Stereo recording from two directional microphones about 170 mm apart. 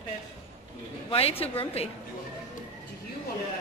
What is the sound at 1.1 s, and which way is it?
Speech, 35° left (ahead or behind).